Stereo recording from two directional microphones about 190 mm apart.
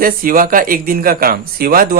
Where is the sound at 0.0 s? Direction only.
50° right (ahead or behind).